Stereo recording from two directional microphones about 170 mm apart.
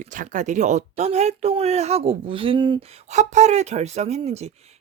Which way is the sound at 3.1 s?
45° right (ahead or behind).